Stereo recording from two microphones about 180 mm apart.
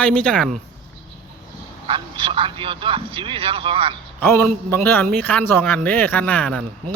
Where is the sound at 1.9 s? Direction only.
30° right (ahead or behind).